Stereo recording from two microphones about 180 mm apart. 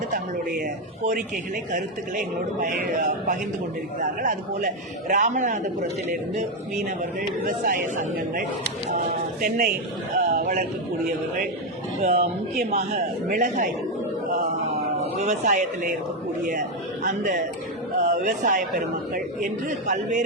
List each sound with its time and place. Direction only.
0.6 s a man's voice: 45° right (ahead or behind)
6.8 s a man's voice: 50° right (ahead or behind)
12.0 s a man's voice: 40° right (ahead or behind)
15.2 s a man's voice: 40° right (ahead or behind)